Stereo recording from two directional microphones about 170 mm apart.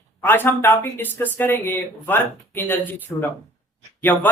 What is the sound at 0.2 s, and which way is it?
Speech, 10° left (ahead or behind).